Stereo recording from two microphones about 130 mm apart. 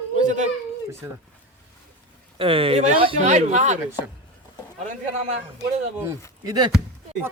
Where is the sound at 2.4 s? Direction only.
45° right (ahead or behind).